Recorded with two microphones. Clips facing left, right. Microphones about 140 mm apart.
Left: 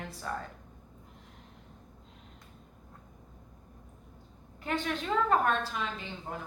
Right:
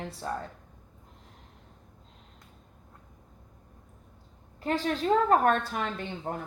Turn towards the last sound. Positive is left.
turn(degrees=-55)  # may be behind; listen again after turning